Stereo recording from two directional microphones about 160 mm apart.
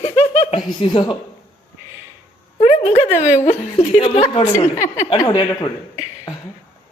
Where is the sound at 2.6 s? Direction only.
40° left (ahead or behind).